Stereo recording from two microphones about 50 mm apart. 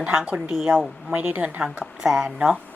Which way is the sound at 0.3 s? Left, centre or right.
Right.